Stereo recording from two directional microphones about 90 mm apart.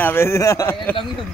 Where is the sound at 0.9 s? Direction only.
20° left (ahead or behind).